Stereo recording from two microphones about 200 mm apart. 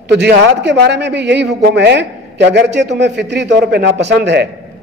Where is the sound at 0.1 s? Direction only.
55° right (ahead or behind).